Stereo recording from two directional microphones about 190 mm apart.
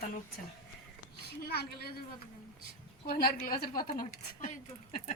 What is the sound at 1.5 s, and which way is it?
Speech, 55° left (ahead or behind).